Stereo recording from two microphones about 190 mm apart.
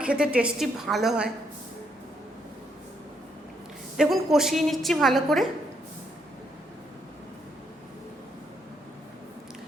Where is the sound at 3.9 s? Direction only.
Centre (ahead or behind).